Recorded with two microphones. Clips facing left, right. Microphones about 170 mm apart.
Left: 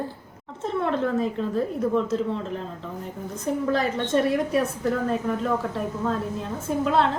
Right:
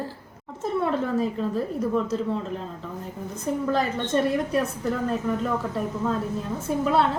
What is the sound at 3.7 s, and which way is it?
Speech, centre (ahead or behind).